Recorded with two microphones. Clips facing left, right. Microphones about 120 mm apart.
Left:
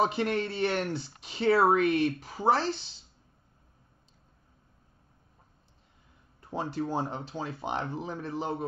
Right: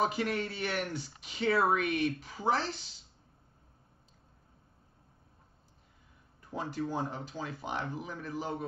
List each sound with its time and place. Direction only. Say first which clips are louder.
0.0 s speech: left 4 dB; 30° left (ahead or behind)
6.5 s speech: left 4 dB; 30° left (ahead or behind)